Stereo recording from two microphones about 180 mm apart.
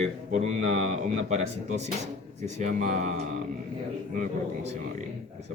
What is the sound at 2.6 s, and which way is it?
Speech, 40° right (ahead or behind).